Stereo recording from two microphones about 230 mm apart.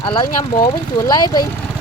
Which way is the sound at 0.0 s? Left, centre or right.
Centre.